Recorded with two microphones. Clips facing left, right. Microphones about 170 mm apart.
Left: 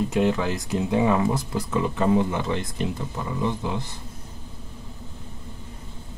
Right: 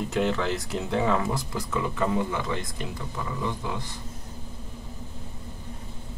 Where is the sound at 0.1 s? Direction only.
15° left (ahead or behind).